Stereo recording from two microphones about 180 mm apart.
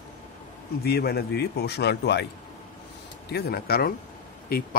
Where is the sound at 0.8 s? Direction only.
60° left (ahead or behind).